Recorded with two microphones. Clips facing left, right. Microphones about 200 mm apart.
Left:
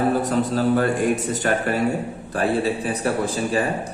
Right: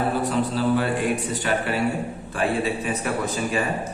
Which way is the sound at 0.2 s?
45° left (ahead or behind).